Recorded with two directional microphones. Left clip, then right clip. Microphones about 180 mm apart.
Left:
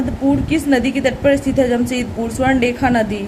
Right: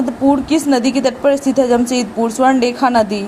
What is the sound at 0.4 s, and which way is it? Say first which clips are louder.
A woman's voice: right 2 dB; 20° right (ahead or behind).